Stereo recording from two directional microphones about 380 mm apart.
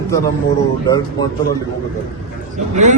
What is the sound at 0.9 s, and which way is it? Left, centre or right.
Speech, centre.